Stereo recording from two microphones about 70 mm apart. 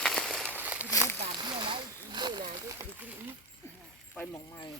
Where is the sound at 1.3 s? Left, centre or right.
Right.